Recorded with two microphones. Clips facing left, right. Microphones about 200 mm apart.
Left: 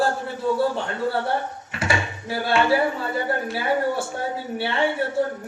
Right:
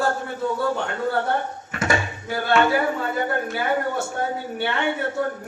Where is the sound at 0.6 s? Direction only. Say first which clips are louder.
Left 1 dB; 30° left (ahead or behind).